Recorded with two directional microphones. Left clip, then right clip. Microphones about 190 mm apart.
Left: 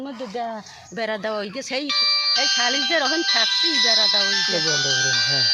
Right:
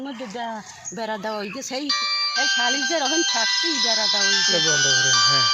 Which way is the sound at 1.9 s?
40° left (ahead or behind).